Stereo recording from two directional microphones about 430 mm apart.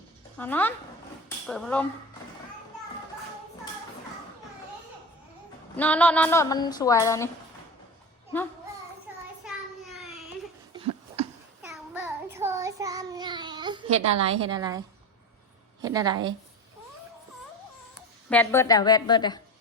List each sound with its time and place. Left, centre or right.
0.3 s speech: centre
5.7 s a woman's voice: centre
11.7 s child singing: centre
14.0 s a woman's voice: right
14.3 s a woman's voice: centre
15.8 s a woman's voice: centre
18.3 s a woman's voice: centre